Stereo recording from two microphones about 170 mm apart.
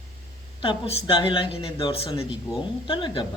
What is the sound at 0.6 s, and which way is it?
Speech, 30° left (ahead or behind).